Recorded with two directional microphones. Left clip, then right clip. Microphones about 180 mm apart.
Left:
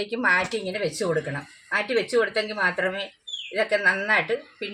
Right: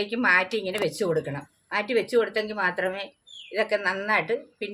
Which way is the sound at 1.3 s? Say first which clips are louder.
Left 4 dB; 20° right (ahead or behind).